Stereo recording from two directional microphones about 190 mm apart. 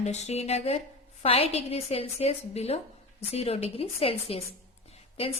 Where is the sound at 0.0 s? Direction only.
35° left (ahead or behind).